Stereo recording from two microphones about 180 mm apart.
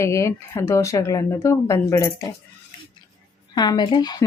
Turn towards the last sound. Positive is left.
turn(degrees=20)  # may be behind; listen again after turning